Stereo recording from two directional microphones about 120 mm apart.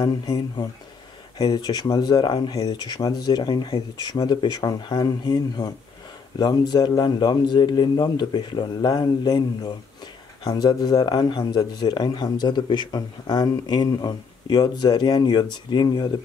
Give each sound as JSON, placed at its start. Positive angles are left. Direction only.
{"t": 0.0, "sound": "speech", "side_deg": 40}